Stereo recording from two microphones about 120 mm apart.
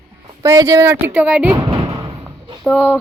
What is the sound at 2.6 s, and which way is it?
Speech, 10° left (ahead or behind).